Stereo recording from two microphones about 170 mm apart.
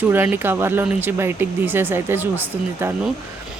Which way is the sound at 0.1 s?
15° right (ahead or behind).